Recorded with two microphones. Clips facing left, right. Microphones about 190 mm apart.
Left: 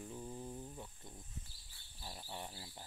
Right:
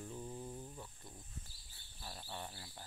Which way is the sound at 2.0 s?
15° left (ahead or behind).